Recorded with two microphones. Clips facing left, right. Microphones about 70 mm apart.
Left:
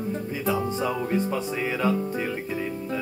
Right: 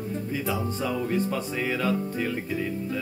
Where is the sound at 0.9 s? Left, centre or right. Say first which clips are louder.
Left 1 dB; centre.